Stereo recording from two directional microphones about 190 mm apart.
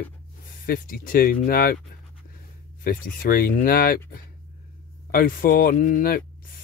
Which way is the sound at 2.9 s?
50° left (ahead or behind).